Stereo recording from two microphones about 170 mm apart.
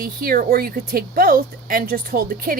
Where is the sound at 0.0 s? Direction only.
60° right (ahead or behind).